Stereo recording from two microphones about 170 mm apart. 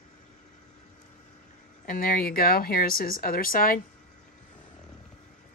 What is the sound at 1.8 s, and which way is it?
Speech, 55° left (ahead or behind).